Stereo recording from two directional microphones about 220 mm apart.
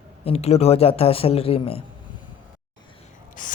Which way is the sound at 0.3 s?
30° left (ahead or behind).